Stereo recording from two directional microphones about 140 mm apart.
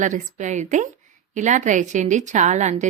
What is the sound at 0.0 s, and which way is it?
Speech, 60° right (ahead or behind).